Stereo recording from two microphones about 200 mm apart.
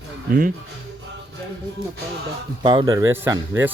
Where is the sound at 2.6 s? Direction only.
25° right (ahead or behind).